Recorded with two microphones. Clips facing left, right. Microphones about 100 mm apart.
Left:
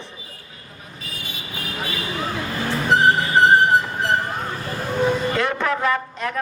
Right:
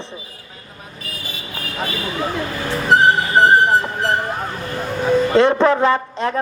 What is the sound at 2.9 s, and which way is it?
Music, 55° right (ahead or behind).